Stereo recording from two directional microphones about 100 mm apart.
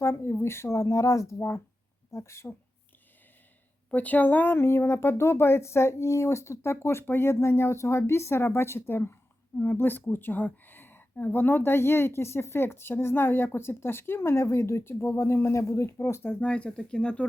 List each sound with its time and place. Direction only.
0.0 s a woman's voice: 30° left (ahead or behind)
3.8 s a woman's voice: 15° left (ahead or behind)
16.5 s speech: 10° left (ahead or behind)